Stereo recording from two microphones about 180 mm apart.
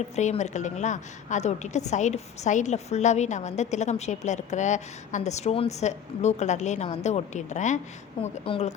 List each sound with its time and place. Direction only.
0.2 s a woman's voice: 40° left (ahead or behind)